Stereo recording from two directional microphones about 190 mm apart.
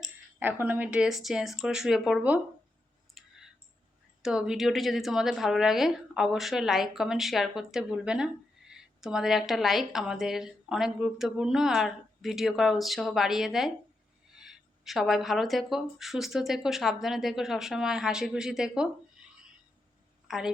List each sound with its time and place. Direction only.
0.0 s a woman's voice: 10° right (ahead or behind)
3.2 s clicking: centre (ahead or behind)
4.2 s a woman's voice: 5° right (ahead or behind)
20.2 s a woman's voice: centre (ahead or behind)